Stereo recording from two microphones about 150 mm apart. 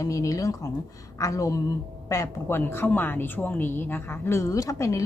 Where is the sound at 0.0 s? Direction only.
20° left (ahead or behind).